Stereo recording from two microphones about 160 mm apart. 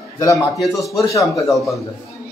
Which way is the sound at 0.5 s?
Centre (ahead or behind).